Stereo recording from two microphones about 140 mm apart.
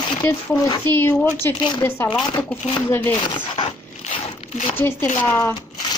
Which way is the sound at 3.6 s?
50° left (ahead or behind).